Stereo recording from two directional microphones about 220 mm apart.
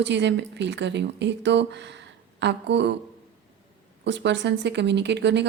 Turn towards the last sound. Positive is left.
turn(degrees=-50)  # may be behind; listen again after turning